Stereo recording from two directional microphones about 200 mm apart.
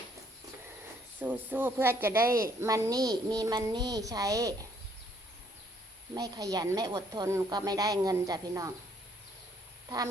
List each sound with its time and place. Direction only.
1.2 s speech: 10° right (ahead or behind)
6.1 s speech: 20° right (ahead or behind)